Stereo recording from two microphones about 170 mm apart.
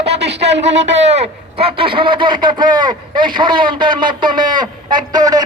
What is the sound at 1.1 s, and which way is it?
A man's voice, 35° right (ahead or behind).